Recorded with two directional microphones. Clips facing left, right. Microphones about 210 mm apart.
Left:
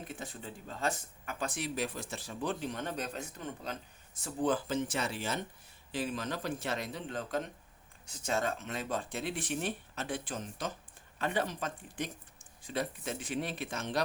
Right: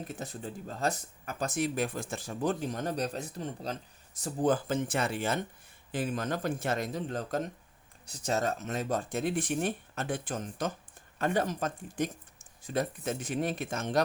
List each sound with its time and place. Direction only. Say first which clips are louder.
0.0 s speech: right 4 dB; 40° right (ahead or behind)
4.2 s speech: right 3 dB; 45° right (ahead or behind)